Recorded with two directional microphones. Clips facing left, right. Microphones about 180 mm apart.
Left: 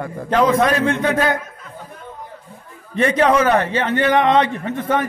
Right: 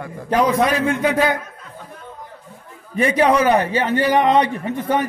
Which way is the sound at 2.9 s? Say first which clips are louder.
Even; 10° right (ahead or behind).